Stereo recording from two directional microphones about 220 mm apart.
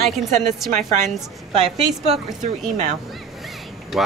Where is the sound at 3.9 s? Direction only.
Centre (ahead or behind).